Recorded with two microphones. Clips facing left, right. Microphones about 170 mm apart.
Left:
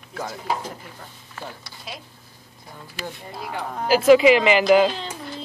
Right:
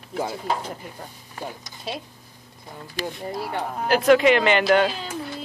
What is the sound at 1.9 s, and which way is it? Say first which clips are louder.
Speech: right 6 dB; 30° right (ahead or behind).